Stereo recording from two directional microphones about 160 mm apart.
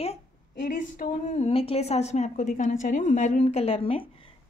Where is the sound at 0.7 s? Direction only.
55° left (ahead or behind).